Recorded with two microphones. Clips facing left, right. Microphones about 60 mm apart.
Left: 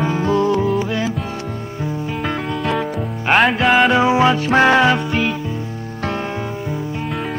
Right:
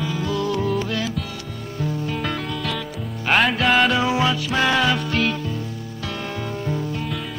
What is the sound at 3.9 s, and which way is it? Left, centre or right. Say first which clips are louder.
Music: left 6 dB; left.